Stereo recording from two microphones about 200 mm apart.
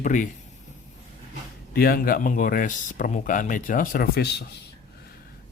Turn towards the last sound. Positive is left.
turn(degrees=55)  # may be behind; listen again after turning